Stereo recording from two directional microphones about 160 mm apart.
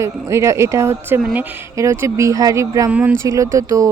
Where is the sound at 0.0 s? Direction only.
20° right (ahead or behind).